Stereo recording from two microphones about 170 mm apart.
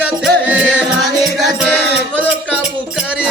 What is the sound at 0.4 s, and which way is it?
Music, 10° right (ahead or behind).